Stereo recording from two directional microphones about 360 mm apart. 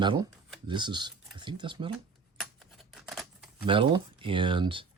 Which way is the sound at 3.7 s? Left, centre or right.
Centre.